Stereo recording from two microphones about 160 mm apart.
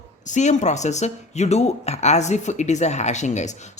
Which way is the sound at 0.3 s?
45° left (ahead or behind).